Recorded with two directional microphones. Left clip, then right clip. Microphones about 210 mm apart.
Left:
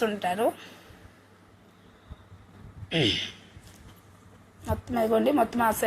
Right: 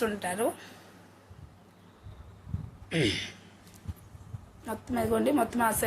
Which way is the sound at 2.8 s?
Centre (ahead or behind).